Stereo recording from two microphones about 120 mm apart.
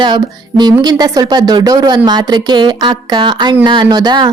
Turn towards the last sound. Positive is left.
turn(degrees=-35)  # may be behind; listen again after turning